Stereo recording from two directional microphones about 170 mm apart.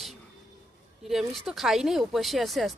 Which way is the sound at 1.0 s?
Centre (ahead or behind).